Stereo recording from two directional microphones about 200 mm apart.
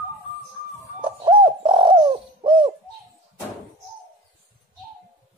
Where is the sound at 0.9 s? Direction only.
25° right (ahead or behind).